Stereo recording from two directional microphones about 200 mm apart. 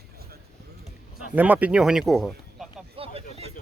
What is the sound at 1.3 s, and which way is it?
Speech, 10° right (ahead or behind).